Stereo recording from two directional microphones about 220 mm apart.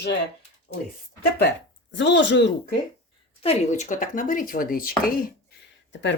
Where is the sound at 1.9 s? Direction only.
55° left (ahead or behind).